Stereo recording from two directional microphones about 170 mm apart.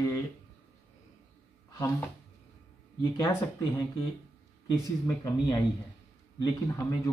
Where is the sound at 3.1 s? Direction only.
20° left (ahead or behind).